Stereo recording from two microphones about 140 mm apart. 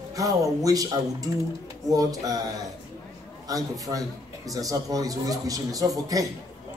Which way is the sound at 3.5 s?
25° right (ahead or behind).